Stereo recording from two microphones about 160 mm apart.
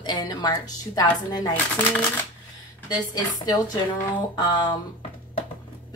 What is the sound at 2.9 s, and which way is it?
Speech, 25° left (ahead or behind).